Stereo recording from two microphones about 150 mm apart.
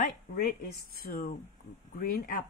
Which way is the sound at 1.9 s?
75° left (ahead or behind).